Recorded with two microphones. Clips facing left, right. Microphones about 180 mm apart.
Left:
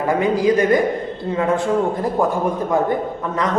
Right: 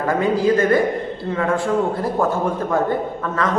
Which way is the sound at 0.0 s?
15° left (ahead or behind).